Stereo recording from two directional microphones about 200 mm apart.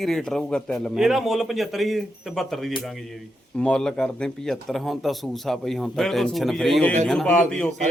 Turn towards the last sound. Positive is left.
turn(degrees=5)  # may be behind; listen again after turning